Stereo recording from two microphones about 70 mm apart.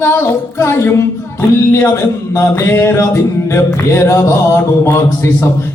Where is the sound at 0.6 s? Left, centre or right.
Left.